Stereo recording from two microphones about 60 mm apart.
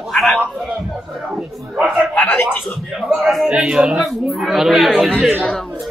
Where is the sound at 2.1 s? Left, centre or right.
Left.